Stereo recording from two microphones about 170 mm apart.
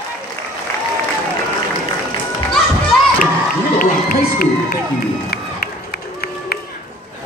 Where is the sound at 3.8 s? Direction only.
60° left (ahead or behind).